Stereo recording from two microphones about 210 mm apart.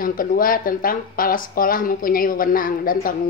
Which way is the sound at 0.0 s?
40° left (ahead or behind).